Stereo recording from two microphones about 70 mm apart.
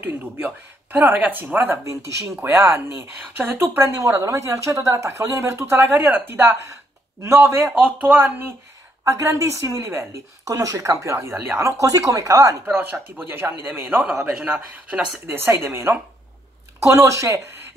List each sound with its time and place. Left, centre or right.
0.9 s speech: right
1.9 s a woman's voice: right
3.8 s a woman's voice: right
9.0 s a woman's voice: right
10.4 s a woman's voice: right
11.3 s speech: right
11.6 s a woman's voice: right
13.2 s speech: right
14.0 s speech: centre
15.2 s a woman's voice: right